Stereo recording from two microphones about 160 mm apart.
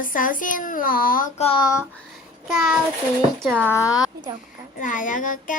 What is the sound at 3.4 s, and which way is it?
Speech, 10° right (ahead or behind).